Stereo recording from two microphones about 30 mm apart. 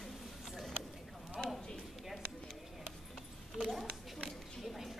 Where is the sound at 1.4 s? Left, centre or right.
Left.